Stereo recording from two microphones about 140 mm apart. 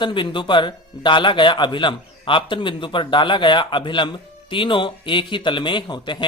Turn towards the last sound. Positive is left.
turn(degrees=35)  # may be behind; listen again after turning